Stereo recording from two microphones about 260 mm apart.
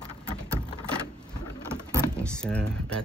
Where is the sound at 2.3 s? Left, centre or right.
Centre.